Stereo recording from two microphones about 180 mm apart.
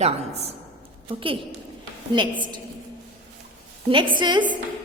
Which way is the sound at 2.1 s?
25° right (ahead or behind).